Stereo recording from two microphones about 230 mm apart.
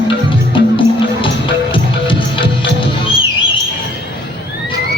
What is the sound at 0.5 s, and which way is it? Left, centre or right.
Music, left.